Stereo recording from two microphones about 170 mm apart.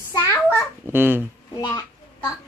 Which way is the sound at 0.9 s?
10° right (ahead or behind).